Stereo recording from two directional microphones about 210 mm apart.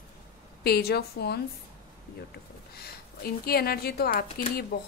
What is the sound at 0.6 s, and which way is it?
Speech, 50° left (ahead or behind).